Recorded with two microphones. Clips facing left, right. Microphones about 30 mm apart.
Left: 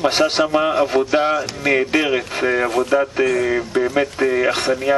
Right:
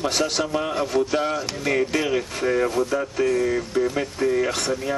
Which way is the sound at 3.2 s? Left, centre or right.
Left.